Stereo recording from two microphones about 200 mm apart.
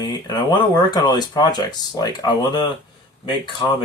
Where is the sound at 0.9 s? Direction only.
20° left (ahead or behind).